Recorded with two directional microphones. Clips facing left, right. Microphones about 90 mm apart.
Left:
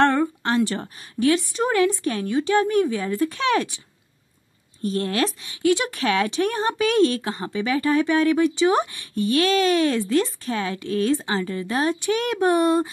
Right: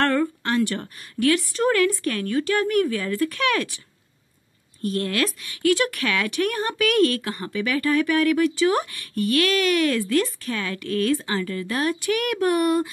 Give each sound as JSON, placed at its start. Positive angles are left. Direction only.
{"t": 0.0, "sound": "speech", "side_deg": 25}
{"t": 4.8, "sound": "speech", "side_deg": 25}